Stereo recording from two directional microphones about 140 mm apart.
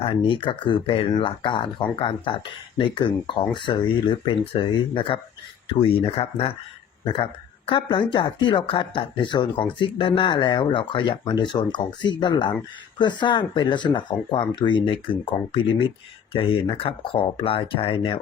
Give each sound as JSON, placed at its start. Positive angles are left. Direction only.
{"t": 0.0, "sound": "speech", "side_deg": 40}